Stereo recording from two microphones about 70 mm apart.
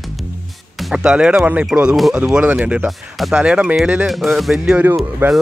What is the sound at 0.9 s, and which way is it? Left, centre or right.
Speech, centre.